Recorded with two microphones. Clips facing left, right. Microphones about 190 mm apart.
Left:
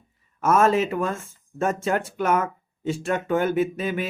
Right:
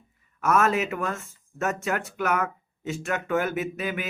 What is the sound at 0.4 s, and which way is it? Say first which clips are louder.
Speech: left 4 dB; 30° left (ahead or behind).